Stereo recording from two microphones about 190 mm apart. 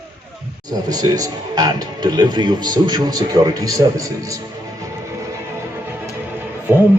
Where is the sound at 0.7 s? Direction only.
20° right (ahead or behind).